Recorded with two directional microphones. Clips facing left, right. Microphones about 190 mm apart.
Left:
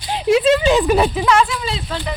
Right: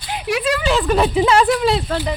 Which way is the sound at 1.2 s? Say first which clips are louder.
Right 1 dB; 30° right (ahead or behind).